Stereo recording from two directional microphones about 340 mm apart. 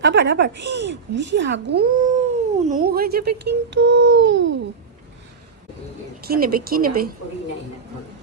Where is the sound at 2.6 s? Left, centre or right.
Right.